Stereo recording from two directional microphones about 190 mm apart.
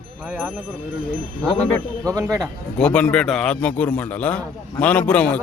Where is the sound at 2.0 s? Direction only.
20° right (ahead or behind).